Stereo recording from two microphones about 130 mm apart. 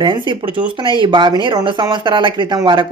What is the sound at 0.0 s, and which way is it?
Speech, 35° right (ahead or behind).